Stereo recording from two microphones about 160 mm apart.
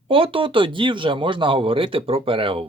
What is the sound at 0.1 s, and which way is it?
Speech, 35° right (ahead or behind).